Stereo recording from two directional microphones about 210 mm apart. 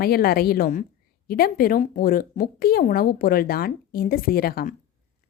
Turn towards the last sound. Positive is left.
turn(degrees=45)  # may be behind; listen again after turning